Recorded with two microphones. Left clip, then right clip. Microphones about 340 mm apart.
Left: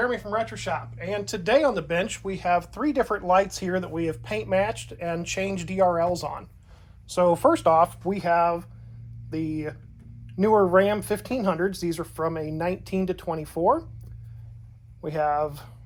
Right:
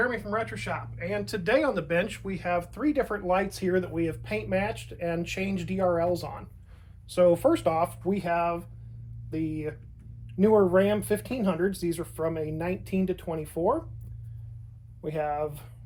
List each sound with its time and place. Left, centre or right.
0.0 s speech: centre
15.0 s speech: left